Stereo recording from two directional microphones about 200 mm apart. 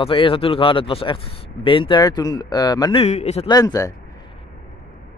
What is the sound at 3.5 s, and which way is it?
Speech, 20° left (ahead or behind).